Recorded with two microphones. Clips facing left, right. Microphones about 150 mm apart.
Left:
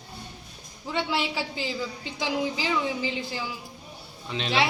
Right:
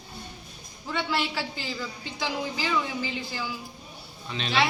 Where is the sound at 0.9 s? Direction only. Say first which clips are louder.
Left 1 dB; 20° left (ahead or behind).